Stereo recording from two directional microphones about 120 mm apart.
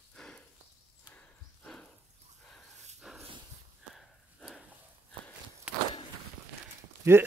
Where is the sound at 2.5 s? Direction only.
5° right (ahead or behind).